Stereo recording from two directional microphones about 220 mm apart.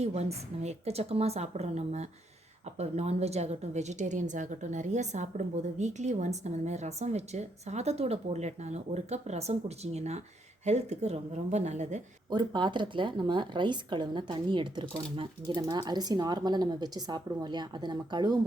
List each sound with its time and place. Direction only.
0.0 s a woman's voice: 30° right (ahead or behind)
12.3 s speech: 20° right (ahead or behind)